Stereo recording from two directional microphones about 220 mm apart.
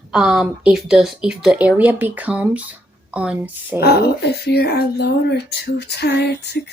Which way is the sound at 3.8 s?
45° left (ahead or behind).